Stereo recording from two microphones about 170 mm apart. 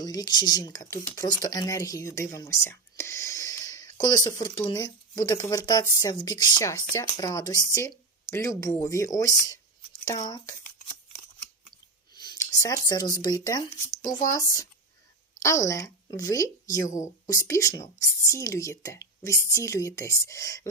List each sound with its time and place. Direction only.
0.0 s speech: 25° left (ahead or behind)
12.1 s speech: 25° left (ahead or behind)